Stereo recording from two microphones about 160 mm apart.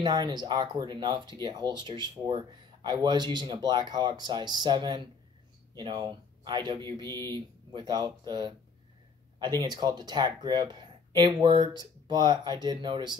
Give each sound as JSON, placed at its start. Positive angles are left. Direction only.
{"t": 0.0, "sound": "speech", "side_deg": -25}